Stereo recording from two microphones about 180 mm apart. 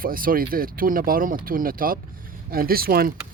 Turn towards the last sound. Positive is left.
turn(degrees=-55)  # may be behind; listen again after turning